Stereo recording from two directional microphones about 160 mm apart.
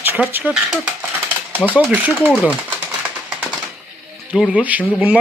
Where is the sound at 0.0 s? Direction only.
10° right (ahead or behind).